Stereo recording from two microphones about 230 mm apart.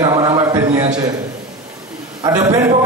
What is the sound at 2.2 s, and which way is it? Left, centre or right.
Speech, centre.